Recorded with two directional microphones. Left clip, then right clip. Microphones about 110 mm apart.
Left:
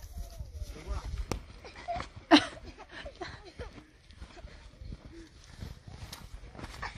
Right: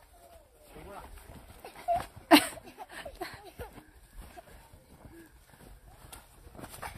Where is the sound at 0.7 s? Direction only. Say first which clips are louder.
Even; 15° left (ahead or behind).